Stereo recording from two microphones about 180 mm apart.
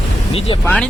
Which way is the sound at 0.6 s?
5° left (ahead or behind).